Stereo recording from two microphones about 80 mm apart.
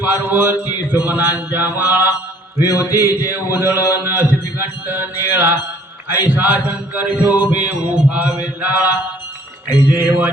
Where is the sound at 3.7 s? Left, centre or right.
Left.